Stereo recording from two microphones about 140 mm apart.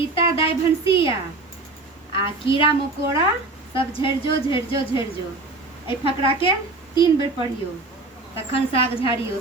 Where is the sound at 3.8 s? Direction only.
40° left (ahead or behind).